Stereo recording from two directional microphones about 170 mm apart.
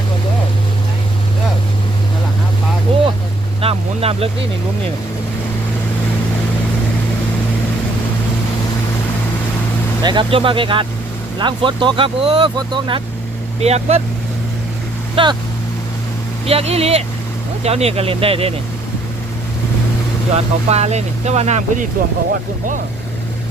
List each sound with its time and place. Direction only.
3.6 s speech: 35° right (ahead or behind)
10.0 s speech: 25° right (ahead or behind)
15.1 s speech: 30° right (ahead or behind)
16.5 s speech: 35° right (ahead or behind)
20.3 s speech: 40° right (ahead or behind)